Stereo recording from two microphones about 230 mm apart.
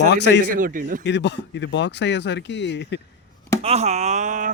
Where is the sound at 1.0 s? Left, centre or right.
Left.